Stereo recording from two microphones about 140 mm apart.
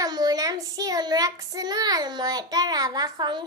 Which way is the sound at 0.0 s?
30° right (ahead or behind).